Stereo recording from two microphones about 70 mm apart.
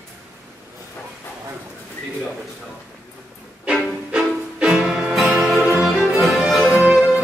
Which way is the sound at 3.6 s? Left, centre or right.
Centre.